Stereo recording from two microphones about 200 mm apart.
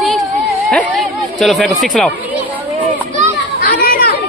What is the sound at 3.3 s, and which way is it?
Children playing, 45° left (ahead or behind).